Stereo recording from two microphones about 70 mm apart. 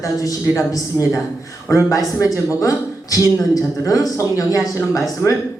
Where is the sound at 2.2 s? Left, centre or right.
Left.